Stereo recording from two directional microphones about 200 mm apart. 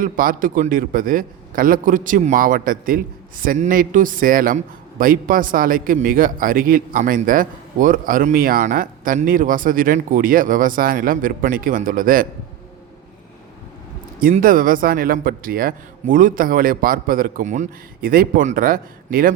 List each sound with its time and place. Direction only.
0.0 s a man's voice: 45° right (ahead or behind)
14.2 s a man's voice: 45° right (ahead or behind)